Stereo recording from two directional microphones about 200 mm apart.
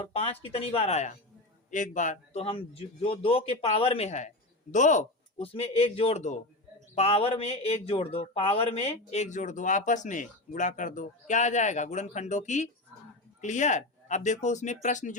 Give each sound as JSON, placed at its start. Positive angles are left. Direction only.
{"t": 0.0, "sound": "a man's voice", "side_deg": 30}